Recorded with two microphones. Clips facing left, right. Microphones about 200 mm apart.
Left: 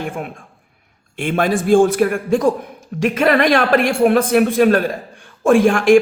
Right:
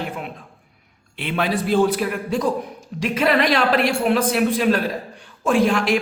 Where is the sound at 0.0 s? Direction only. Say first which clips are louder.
Left 4 dB; 50° left (ahead or behind).